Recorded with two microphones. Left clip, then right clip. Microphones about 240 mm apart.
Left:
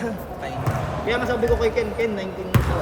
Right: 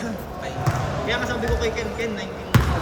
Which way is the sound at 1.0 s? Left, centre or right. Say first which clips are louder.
Left 5 dB; left.